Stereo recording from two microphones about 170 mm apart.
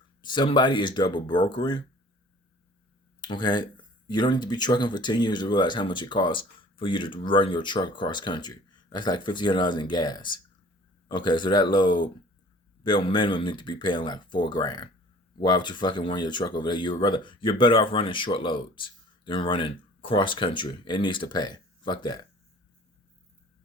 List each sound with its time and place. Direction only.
0.2 s speech: 25° left (ahead or behind)
3.2 s speech: 25° left (ahead or behind)